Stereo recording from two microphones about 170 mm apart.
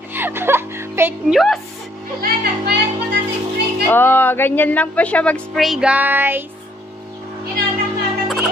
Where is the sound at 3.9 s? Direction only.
10° left (ahead or behind); by 6.4 s 10° right (ahead or behind).